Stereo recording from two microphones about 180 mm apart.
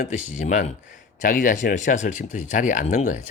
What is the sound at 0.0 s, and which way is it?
Speech, 45° left (ahead or behind).